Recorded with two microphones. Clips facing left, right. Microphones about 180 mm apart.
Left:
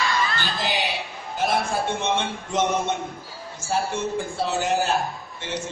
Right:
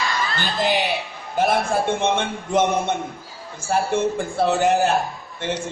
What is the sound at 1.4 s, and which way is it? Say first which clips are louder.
Speech: right 5 dB; 55° right (ahead or behind).